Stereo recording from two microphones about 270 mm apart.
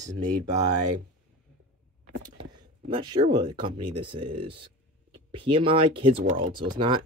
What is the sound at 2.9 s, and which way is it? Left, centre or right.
Speech, centre.